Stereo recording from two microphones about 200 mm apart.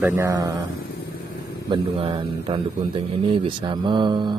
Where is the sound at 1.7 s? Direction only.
25° right (ahead or behind).